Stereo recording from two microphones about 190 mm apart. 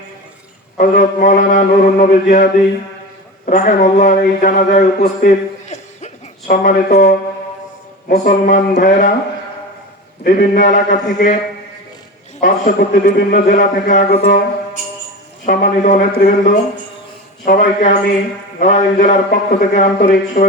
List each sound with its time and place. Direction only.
0.8 s a man's voice: 45° left (ahead or behind)
10.2 s a man's voice: 50° left (ahead or behind)
12.4 s a man's voice: 45° left (ahead or behind)
15.4 s a man's voice: 45° left (ahead or behind)